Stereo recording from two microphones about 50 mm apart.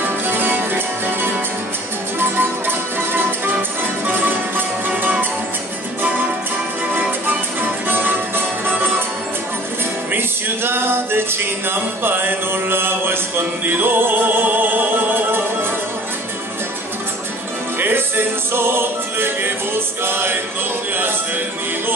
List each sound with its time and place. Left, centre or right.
0.0 s music: right
7.0 s music: right
10.1 s music: right
17.7 s music: right